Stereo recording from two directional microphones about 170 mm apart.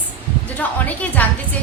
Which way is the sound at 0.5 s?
10° left (ahead or behind).